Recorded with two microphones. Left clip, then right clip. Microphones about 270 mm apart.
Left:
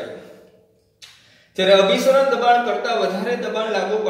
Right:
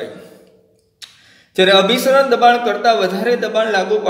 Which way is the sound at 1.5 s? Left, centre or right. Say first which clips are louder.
Right 3 dB; right.